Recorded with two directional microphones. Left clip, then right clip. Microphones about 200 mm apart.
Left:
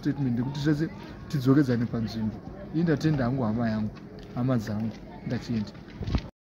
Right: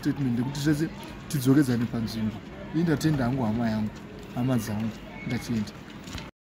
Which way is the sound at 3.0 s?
Centre (ahead or behind).